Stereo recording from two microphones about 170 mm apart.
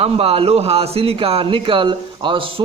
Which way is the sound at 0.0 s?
35° right (ahead or behind).